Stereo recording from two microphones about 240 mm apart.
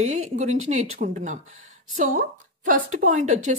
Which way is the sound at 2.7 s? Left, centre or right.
Right.